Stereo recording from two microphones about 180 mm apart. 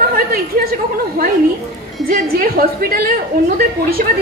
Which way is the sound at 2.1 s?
50° right (ahead or behind).